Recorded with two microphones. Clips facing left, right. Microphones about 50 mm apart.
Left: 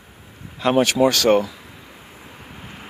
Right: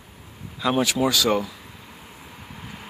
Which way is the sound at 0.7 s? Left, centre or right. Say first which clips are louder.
Left 6 dB; left.